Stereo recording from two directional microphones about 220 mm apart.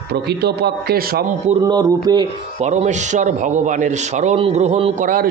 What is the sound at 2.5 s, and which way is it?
A man's voice, 30° right (ahead or behind).